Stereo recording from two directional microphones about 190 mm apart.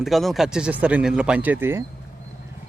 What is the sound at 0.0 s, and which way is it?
Speech, centre (ahead or behind).